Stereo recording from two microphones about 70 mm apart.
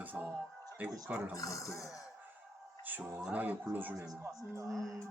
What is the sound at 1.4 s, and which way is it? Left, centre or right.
Speech, left.